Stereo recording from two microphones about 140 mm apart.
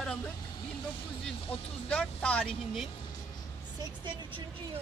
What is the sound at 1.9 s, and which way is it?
Speech, 10° left (ahead or behind).